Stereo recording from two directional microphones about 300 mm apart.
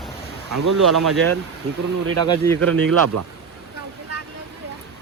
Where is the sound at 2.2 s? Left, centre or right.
Centre.